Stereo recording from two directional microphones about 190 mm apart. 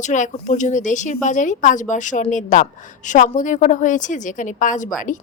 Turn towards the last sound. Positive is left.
turn(degrees=40)  # may be behind; listen again after turning